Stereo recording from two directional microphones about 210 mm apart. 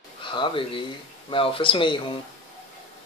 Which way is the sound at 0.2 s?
25° left (ahead or behind).